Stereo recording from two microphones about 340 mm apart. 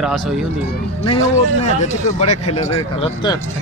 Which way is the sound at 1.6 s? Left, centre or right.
Centre.